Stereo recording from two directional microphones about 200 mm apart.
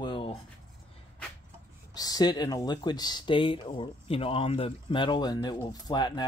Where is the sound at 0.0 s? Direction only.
25° left (ahead or behind).